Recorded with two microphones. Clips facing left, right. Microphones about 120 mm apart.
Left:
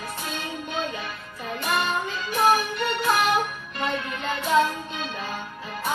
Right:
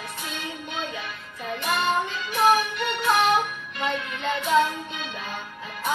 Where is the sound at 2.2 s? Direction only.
40° left (ahead or behind).